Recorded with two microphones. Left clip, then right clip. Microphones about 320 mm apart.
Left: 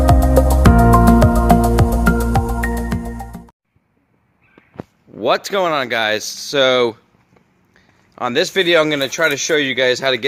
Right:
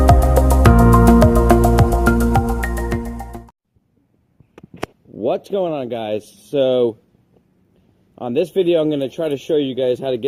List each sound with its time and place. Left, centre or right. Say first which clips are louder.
0.0 s music: left 1 dB; centre
5.1 s speech: left 4 dB; left
8.1 s speech: left 2 dB; left